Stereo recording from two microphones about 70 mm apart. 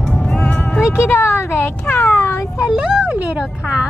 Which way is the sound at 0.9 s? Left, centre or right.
Left.